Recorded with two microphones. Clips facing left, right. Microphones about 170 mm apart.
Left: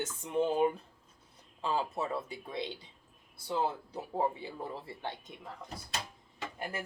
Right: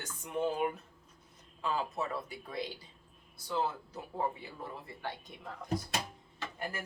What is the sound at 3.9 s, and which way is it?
Speech, 30° left (ahead or behind).